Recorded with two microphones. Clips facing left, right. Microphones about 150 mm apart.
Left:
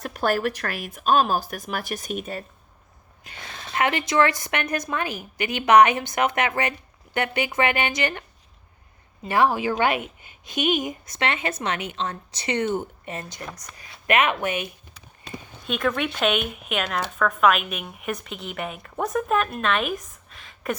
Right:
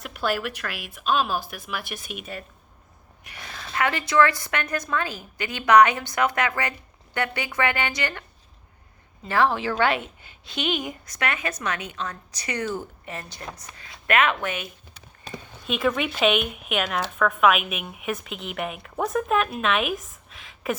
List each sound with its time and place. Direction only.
0.0 s speech: 45° left (ahead or behind)
3.2 s speech: 25° left (ahead or behind)
9.2 s speech: 15° left (ahead or behind)
15.6 s speech: centre (ahead or behind)